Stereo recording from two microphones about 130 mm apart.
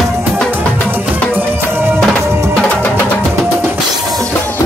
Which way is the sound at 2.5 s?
10° left (ahead or behind).